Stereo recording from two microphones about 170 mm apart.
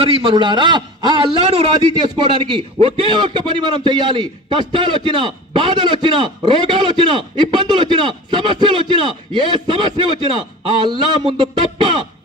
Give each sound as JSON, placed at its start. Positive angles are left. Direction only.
{"t": 0.0, "sound": "a man's voice", "side_deg": -35}